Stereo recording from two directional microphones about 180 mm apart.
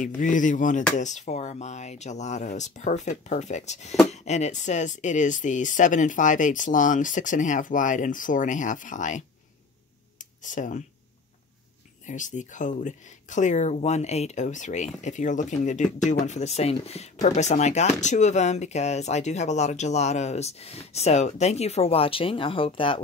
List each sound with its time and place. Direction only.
0.0 s speech: 45° left (ahead or behind)
10.1 s a sound: 45° left (ahead or behind)
12.1 s speech: 45° left (ahead or behind)